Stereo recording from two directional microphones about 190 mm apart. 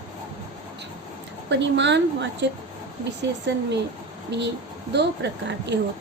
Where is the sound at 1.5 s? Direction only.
65° right (ahead or behind).